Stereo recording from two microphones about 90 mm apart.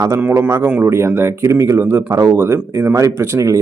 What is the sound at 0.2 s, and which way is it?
Speech, 20° right (ahead or behind).